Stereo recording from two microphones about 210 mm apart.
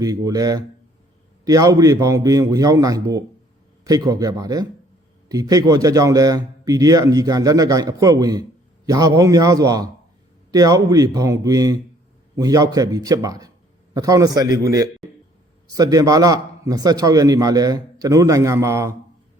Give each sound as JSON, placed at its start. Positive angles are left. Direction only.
{"t": 0.0, "sound": "a man's voice", "side_deg": -15}